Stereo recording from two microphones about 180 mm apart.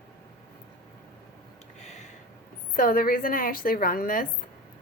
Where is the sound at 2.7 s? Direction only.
50° left (ahead or behind).